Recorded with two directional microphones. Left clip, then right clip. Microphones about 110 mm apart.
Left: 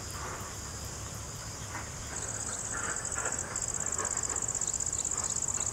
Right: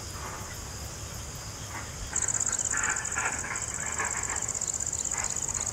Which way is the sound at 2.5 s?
50° right (ahead or behind).